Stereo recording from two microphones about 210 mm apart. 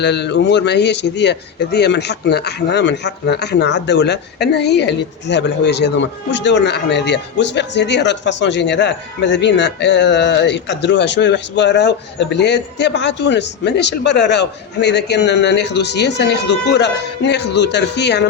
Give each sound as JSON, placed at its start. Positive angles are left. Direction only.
{"t": 0.0, "sound": "speech", "side_deg": 55}